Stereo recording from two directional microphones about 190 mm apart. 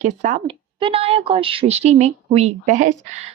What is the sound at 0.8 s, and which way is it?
Speech, 30° right (ahead or behind).